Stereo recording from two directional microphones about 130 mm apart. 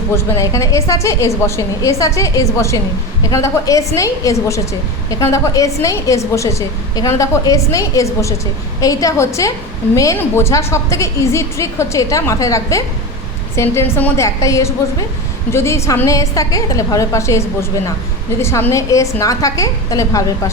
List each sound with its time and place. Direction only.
0.3 s a woman's voice: 25° left (ahead or behind)